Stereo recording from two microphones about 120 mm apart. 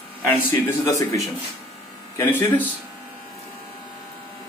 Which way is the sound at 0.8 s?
30° left (ahead or behind).